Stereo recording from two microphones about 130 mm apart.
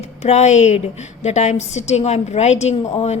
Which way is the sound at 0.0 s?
55° left (ahead or behind).